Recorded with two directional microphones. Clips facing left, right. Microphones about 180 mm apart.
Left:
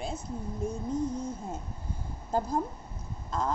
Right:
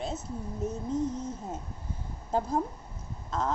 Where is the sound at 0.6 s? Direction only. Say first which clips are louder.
Right 1 dB; 25° right (ahead or behind).